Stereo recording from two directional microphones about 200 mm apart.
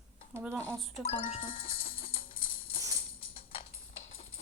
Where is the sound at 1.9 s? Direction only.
30° left (ahead or behind).